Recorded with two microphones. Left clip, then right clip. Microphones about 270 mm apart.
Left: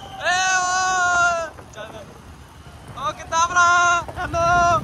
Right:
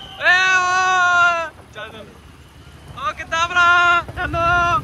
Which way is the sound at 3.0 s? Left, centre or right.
Centre.